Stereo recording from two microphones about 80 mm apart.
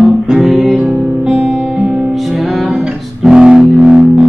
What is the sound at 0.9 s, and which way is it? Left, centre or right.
Music, centre.